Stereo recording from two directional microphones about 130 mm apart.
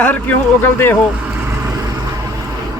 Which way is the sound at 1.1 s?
10° right (ahead or behind).